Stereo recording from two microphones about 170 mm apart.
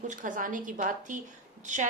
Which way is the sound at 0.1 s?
50° right (ahead or behind).